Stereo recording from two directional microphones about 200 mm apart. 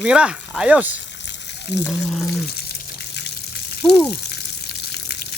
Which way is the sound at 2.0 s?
Centre (ahead or behind).